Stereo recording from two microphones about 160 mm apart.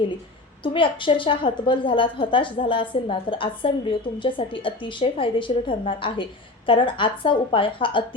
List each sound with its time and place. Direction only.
0.6 s a woman's voice: 30° left (ahead or behind)